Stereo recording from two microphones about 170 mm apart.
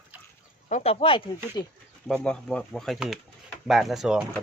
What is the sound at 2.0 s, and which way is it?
Speech, 5° left (ahead or behind).